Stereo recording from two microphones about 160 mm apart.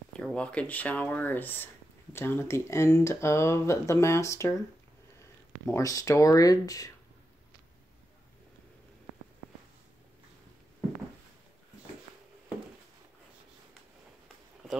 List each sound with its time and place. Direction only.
0.2 s speech: 5° left (ahead or behind)
5.7 s speech: 20° left (ahead or behind)